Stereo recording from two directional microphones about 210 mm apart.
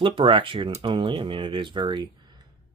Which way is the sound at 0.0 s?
25° right (ahead or behind).